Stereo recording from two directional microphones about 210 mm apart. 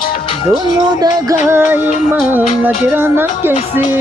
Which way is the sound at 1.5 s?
10° right (ahead or behind).